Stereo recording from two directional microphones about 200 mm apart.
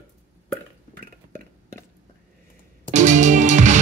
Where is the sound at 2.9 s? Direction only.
35° right (ahead or behind).